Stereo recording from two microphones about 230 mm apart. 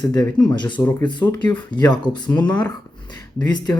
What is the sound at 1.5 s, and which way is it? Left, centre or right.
Speech, centre.